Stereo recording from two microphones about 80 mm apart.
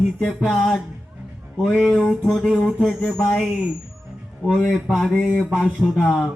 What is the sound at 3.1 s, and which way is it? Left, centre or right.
Speech, centre.